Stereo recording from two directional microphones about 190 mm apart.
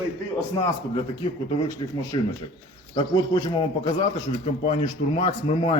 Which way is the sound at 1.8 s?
30° left (ahead or behind).